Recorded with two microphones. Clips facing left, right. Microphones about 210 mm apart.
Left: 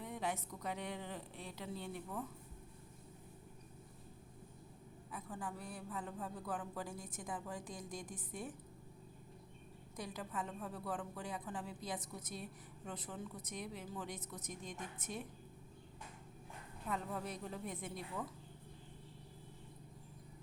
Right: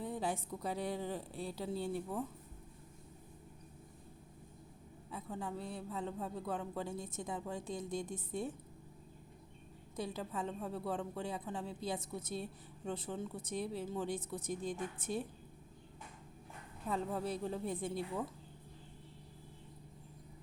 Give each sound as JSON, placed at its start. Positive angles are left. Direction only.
{"t": 0.0, "sound": "a woman's voice", "side_deg": -30}
{"t": 5.1, "sound": "a woman's voice", "side_deg": -25}
{"t": 9.9, "sound": "a woman's voice", "side_deg": -25}
{"t": 16.9, "sound": "a woman's voice", "side_deg": -30}